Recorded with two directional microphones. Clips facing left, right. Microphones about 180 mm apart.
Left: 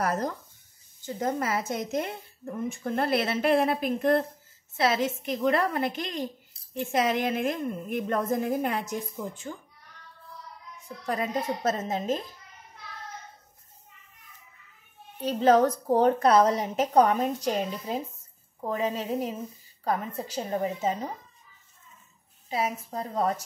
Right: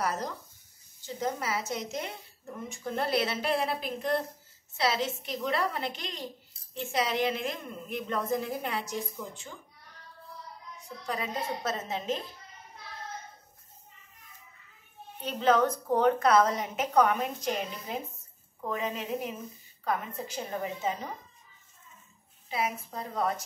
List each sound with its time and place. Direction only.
0.0 s speech: 50° left (ahead or behind)
11.1 s speech: 45° left (ahead or behind)
15.2 s a woman's voice: 40° left (ahead or behind)
22.5 s a woman's voice: 40° left (ahead or behind)